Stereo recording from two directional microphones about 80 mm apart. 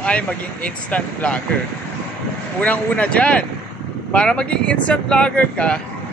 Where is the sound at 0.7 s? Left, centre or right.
Centre.